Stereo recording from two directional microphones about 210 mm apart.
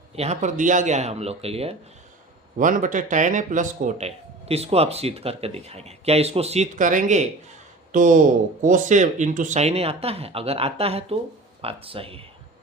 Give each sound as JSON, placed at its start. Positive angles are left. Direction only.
{"t": 0.2, "sound": "speech", "side_deg": -35}
{"t": 2.6, "sound": "speech", "side_deg": -40}